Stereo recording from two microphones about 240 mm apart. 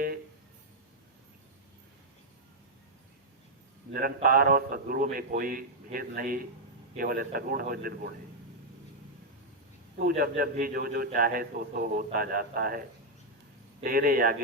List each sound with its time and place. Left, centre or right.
3.9 s a man's voice: right
10.1 s a man's voice: right
13.8 s a man's voice: right